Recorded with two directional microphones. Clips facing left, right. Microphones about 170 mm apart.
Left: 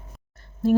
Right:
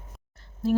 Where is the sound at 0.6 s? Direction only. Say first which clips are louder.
Left 5 dB; 50° left (ahead or behind).